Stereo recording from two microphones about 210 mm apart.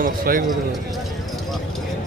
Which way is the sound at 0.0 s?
40° right (ahead or behind).